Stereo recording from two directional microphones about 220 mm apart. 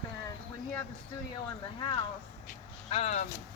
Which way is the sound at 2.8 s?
30° left (ahead or behind).